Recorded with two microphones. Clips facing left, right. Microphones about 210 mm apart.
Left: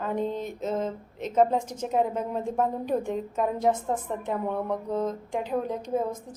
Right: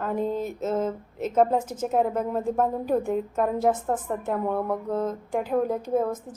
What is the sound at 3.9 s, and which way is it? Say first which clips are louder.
Speech: right 2 dB; 55° right (ahead or behind).